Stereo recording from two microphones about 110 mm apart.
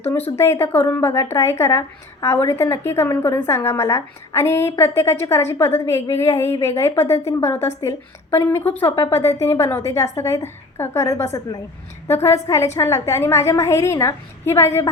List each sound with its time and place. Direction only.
0.3 s a woman's voice: 25° left (ahead or behind)